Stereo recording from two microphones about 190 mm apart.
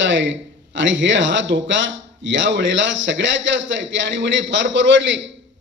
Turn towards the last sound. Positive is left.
turn(degrees=-75)  # may be behind; listen again after turning